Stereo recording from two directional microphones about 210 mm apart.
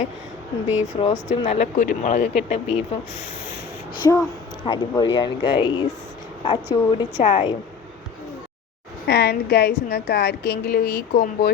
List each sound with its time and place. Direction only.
0.9 s speech: 30° left (ahead or behind)
4.1 s speech: 15° left (ahead or behind)
9.0 s a woman's voice: 50° left (ahead or behind)